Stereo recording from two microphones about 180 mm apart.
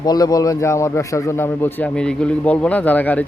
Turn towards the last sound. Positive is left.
turn(degrees=10)  # may be behind; listen again after turning